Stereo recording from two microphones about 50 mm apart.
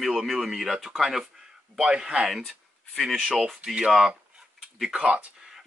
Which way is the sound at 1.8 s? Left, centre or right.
Centre.